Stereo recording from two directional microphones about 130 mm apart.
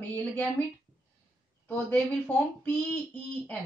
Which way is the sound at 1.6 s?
15° left (ahead or behind).